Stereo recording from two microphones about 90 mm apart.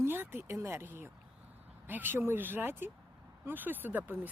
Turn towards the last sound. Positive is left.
turn(degrees=-20)  # may be behind; listen again after turning